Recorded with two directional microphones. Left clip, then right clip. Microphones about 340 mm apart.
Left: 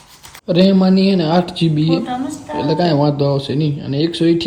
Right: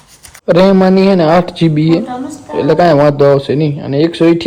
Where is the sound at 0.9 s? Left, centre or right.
Centre.